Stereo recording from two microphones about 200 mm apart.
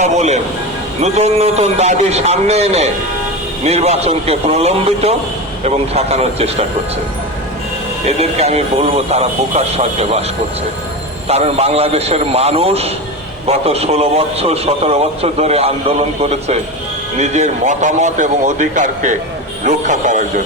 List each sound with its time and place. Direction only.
0.0 s a man's voice: 35° right (ahead or behind)
8.0 s a man's voice: 30° right (ahead or behind)
11.3 s a man's voice: 30° right (ahead or behind)